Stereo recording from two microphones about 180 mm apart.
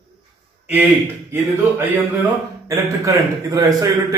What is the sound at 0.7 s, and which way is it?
A man's voice, 10° right (ahead or behind).